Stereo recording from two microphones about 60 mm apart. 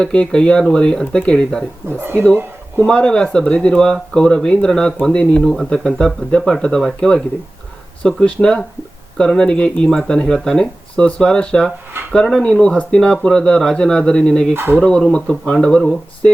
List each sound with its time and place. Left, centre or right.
0.0 s speech: centre
5.4 s speech: centre
5.6 s speech: centre
14.5 s speech: right
14.8 s speech: centre